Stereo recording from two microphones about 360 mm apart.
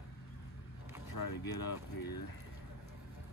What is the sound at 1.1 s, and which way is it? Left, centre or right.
Speech, left.